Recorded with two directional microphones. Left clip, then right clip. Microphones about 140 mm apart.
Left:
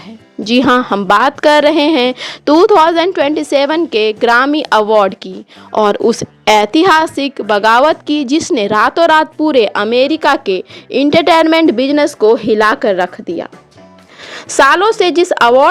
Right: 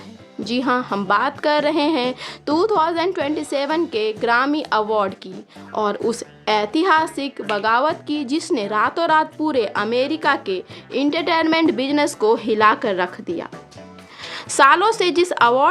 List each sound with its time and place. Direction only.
0.4 s a woman's voice: 60° left (ahead or behind)
11.5 s speech: 45° left (ahead or behind)